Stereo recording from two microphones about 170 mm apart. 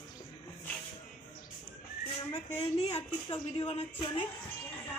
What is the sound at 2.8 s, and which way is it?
A woman's voice, 30° left (ahead or behind).